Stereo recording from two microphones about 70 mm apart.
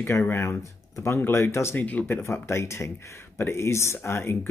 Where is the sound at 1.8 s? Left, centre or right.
Left.